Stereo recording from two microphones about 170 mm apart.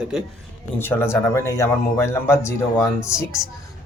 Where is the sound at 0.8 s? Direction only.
15° left (ahead or behind).